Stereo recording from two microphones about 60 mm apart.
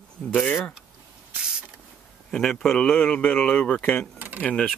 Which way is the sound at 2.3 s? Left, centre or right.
Centre.